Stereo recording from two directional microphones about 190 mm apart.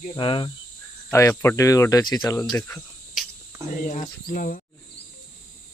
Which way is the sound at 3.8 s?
45° left (ahead or behind).